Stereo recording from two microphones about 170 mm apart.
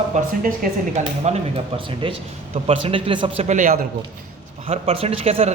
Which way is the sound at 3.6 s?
50° right (ahead or behind).